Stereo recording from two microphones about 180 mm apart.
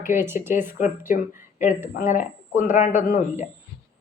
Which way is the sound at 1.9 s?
45° left (ahead or behind).